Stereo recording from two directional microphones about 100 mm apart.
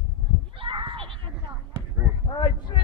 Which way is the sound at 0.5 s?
60° right (ahead or behind).